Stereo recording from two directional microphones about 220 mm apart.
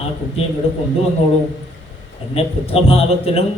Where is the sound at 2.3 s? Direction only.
25° left (ahead or behind).